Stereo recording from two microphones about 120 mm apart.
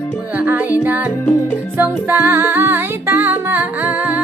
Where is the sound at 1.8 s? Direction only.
20° right (ahead or behind).